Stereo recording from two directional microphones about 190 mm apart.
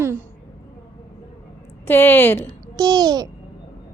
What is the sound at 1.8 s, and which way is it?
Speech, 10° left (ahead or behind).